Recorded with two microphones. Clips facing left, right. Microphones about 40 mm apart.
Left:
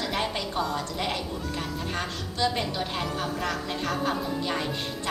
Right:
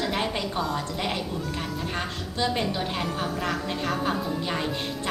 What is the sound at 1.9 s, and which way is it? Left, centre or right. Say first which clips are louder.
A woman's voice: right 1 dB; centre.